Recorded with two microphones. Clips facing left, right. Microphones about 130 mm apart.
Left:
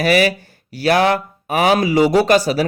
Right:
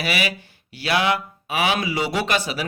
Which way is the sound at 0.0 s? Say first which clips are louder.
Left 10 dB; 45° left (ahead or behind).